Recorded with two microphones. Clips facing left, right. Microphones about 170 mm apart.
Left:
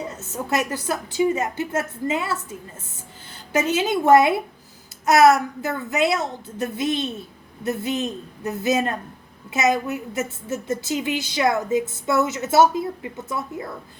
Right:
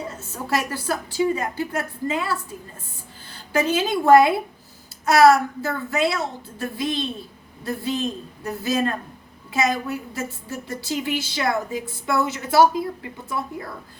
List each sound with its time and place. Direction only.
0.2 s a woman's voice: 20° left (ahead or behind)